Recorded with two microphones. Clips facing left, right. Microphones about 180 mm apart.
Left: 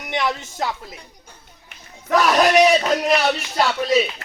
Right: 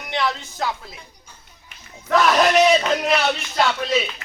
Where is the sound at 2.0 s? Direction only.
10° left (ahead or behind).